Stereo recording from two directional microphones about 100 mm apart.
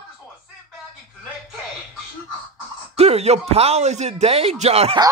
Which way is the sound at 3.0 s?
90° right.